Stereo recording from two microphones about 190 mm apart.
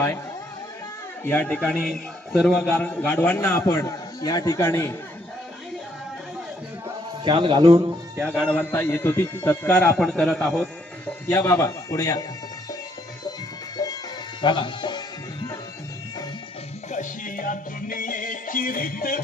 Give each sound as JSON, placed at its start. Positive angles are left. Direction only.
{"t": 1.2, "sound": "a man's voice", "side_deg": 10}
{"t": 7.3, "sound": "a man's voice", "side_deg": -25}
{"t": 8.4, "sound": "a man's voice", "side_deg": 10}
{"t": 10.1, "sound": "a man's voice", "side_deg": 0}
{"t": 11.3, "sound": "a man's voice", "side_deg": 15}
{"t": 13.7, "sound": "music", "side_deg": 20}
{"t": 14.4, "sound": "speech", "side_deg": 25}
{"t": 16.9, "sound": "music", "side_deg": 45}